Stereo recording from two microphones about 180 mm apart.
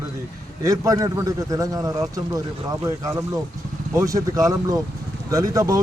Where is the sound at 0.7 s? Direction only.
20° right (ahead or behind).